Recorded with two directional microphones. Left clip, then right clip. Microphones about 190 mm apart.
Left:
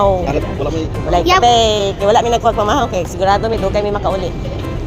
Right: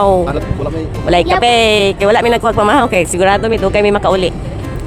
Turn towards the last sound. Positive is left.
turn(degrees=-50)  # may be behind; listen again after turning